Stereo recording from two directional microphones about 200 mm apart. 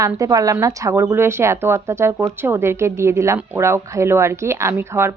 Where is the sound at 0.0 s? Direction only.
15° right (ahead or behind).